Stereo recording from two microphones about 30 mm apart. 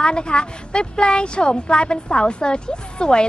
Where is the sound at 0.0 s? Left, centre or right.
Left.